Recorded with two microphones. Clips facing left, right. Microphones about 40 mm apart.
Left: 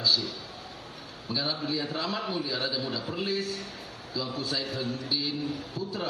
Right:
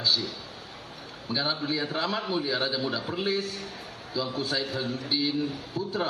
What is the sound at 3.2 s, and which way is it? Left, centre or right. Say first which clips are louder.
A man's voice: right 2 dB; right.